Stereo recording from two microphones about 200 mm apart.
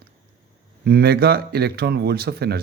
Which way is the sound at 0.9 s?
50° right (ahead or behind).